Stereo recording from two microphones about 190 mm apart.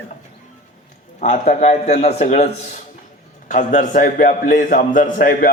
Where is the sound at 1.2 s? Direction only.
40° left (ahead or behind).